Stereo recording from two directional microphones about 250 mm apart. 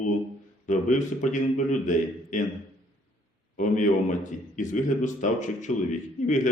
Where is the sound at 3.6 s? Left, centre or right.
Left.